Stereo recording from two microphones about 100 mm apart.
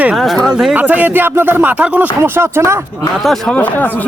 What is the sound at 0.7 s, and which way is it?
Speech, 15° right (ahead or behind).